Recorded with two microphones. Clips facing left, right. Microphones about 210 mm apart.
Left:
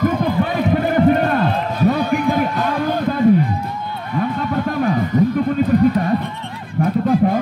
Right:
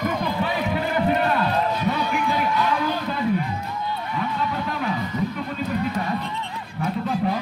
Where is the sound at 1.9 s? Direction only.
50° left (ahead or behind).